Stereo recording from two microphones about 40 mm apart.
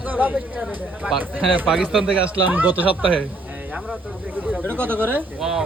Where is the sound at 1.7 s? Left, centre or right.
Centre.